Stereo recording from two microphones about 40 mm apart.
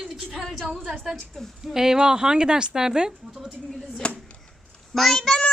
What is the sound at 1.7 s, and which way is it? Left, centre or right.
Speech, centre.